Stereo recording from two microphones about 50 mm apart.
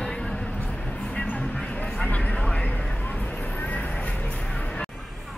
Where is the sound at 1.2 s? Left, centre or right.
Left.